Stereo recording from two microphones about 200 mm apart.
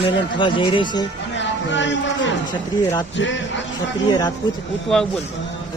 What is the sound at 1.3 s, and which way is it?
Speech, 65° left (ahead or behind).